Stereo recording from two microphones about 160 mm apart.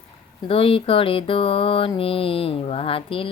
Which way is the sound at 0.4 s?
35° left (ahead or behind).